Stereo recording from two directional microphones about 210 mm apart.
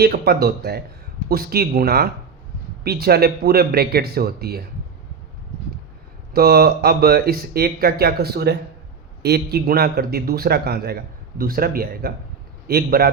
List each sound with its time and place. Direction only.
0.0 s speech: 50° right (ahead or behind)
6.3 s speech: 50° right (ahead or behind)